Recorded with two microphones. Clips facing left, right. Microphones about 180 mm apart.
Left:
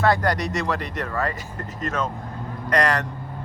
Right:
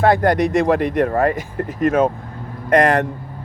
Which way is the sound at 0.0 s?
50° right (ahead or behind).